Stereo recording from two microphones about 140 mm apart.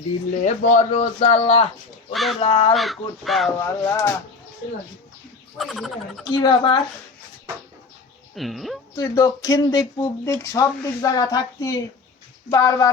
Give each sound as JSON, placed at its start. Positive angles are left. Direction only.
{"t": 0.4, "sound": "speech", "side_deg": 60}
{"t": 2.1, "sound": "speech", "side_deg": 0}
{"t": 2.4, "sound": "speech", "side_deg": 35}
{"t": 2.7, "sound": "speech", "side_deg": 0}
{"t": 3.8, "sound": "speech", "side_deg": 20}
{"t": 5.5, "sound": "speech", "side_deg": 0}
{"t": 6.2, "sound": "speech", "side_deg": 30}
{"t": 8.4, "sound": "speech", "side_deg": 0}
{"t": 9.0, "sound": "speech", "side_deg": 25}